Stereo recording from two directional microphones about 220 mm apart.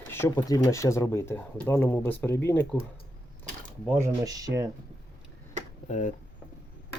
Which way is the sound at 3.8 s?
15° right (ahead or behind).